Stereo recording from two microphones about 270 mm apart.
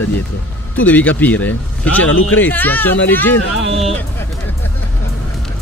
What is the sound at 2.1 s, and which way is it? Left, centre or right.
Speech, left.